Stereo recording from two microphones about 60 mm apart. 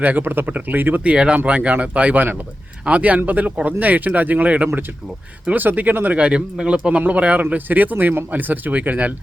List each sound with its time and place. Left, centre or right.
0.0 s speech: right
1.1 s speech: centre